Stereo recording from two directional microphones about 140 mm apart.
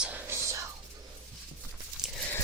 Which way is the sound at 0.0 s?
15° right (ahead or behind).